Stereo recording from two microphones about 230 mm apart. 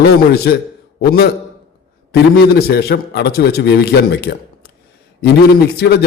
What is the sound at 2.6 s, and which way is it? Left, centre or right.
A man's voice, left.